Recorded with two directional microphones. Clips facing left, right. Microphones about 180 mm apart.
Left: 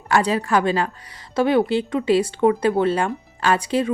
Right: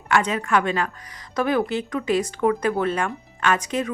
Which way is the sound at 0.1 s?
35° left (ahead or behind).